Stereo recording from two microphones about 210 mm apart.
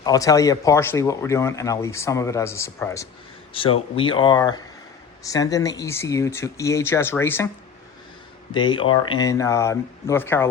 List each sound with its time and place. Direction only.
0.0 s speech: 15° left (ahead or behind)
3.5 s speech: 25° left (ahead or behind)
8.5 s speech: 20° left (ahead or behind)